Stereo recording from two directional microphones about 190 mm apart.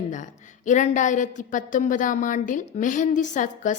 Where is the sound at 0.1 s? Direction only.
40° left (ahead or behind).